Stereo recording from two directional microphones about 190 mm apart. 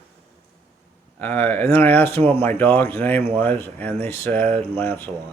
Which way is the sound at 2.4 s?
10° left (ahead or behind).